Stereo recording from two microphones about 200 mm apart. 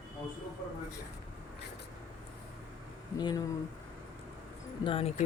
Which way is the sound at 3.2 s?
20° left (ahead or behind).